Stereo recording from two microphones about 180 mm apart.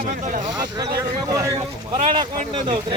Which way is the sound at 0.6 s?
25° right (ahead or behind).